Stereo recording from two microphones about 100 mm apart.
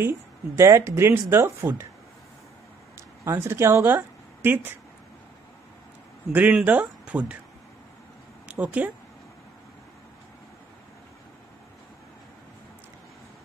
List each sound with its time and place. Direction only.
0.6 s speech: 30° right (ahead or behind)
3.3 s speech: 25° right (ahead or behind)
6.3 s speech: 15° right (ahead or behind)
8.5 s speech: 10° right (ahead or behind)